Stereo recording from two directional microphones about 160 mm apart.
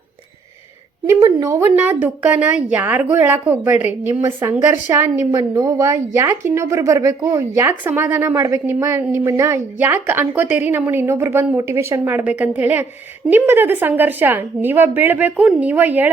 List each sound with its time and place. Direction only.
1.2 s speech: 20° right (ahead or behind)
1.7 s a woman's voice: 10° right (ahead or behind)